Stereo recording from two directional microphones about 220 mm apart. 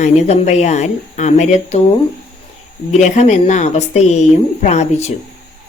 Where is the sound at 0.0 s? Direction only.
30° left (ahead or behind).